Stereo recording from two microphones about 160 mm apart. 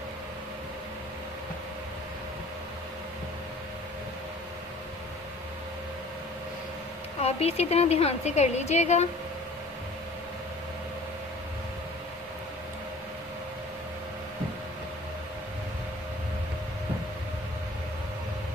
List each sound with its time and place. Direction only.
7.2 s a woman's voice: 40° left (ahead or behind)